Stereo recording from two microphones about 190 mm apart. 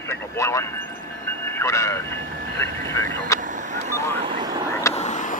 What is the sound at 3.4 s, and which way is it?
Vehicle, 40° right (ahead or behind).